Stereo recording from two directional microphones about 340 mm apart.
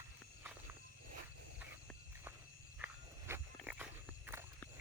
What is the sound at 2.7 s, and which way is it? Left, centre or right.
Walk, centre.